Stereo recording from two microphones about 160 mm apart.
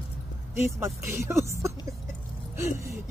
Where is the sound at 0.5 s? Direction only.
15° right (ahead or behind).